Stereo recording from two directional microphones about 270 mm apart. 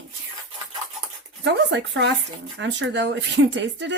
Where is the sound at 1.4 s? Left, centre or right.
Right.